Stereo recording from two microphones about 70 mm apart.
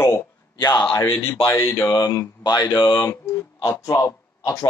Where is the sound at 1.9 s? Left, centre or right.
Left.